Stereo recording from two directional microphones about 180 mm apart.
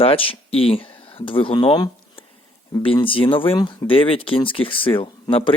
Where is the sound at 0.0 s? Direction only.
30° left (ahead or behind).